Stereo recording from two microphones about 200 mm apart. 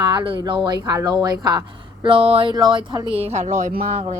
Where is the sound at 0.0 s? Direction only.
20° right (ahead or behind).